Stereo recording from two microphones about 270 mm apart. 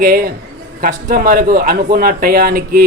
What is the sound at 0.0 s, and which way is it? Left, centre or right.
A man's voice, right.